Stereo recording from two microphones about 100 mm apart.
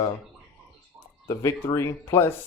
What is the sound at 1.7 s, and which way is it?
Speech, 30° left (ahead or behind).